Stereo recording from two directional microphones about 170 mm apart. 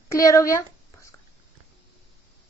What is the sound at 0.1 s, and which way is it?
Speech, 20° left (ahead or behind).